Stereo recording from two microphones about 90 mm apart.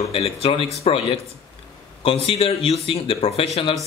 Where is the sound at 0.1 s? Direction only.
90° left.